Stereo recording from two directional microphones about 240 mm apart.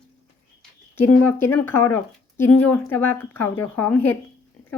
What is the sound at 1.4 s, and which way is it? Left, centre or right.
A woman's voice, centre.